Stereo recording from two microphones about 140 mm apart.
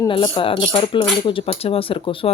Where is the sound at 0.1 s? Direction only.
40° left (ahead or behind).